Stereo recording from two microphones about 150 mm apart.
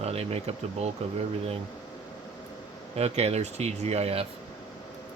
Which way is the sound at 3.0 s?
45° right (ahead or behind).